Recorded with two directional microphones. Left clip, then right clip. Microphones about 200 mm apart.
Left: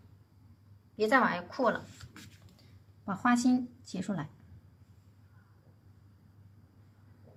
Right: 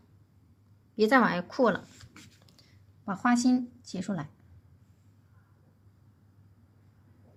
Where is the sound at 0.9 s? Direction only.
60° right (ahead or behind).